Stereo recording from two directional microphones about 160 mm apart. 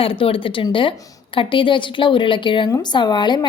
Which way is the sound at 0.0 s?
35° left (ahead or behind).